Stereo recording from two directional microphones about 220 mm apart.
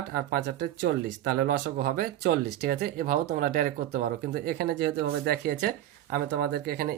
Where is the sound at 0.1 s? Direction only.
40° right (ahead or behind).